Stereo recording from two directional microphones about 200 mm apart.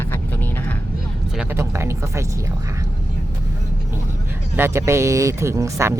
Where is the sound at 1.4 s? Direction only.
15° right (ahead or behind).